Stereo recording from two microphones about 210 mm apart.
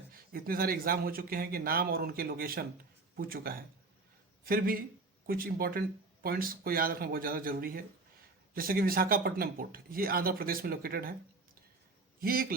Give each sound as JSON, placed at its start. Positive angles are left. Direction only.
{"t": 0.1, "sound": "speech", "side_deg": -45}
{"t": 12.2, "sound": "speech", "side_deg": -45}